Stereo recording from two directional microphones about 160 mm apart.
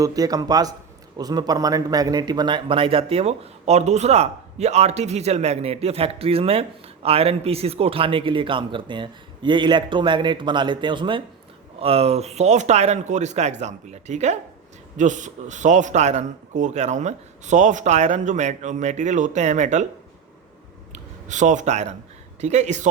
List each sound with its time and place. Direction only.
0.0 s a man's voice: 25° right (ahead or behind); by 19.8 s 45° right (ahead or behind)
20.9 s a man's voice: 50° right (ahead or behind)